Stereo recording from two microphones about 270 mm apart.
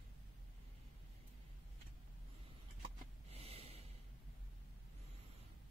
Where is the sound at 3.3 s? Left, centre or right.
Right.